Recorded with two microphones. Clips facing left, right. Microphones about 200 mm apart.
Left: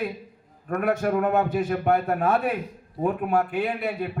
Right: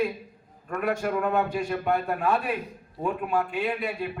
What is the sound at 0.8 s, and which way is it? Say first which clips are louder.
A man's voice: left 3 dB; 45° left (ahead or behind).